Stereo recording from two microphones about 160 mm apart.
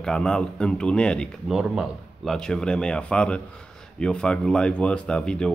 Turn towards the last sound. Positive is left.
turn(degrees=5)  # may be behind; listen again after turning